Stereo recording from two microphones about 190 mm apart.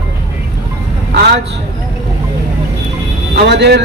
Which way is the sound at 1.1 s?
60° right (ahead or behind).